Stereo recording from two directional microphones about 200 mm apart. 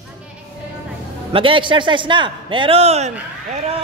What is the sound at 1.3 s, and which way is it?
Speech, 25° right (ahead or behind).